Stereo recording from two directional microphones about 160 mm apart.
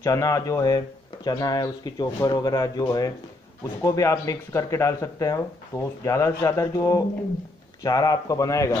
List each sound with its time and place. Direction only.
0.0 s speech: 20° left (ahead or behind)